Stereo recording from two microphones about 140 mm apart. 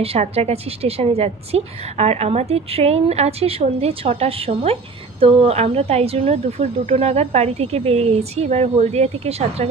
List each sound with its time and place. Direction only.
0.0 s a woman's voice: 45° right (ahead or behind)